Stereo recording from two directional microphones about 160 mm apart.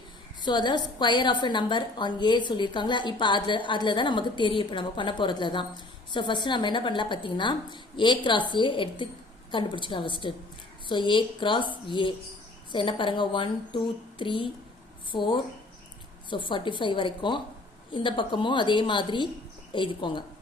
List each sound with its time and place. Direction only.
0.4 s a woman's voice: 30° left (ahead or behind)